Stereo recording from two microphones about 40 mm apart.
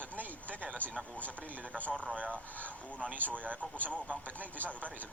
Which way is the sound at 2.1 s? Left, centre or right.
Right.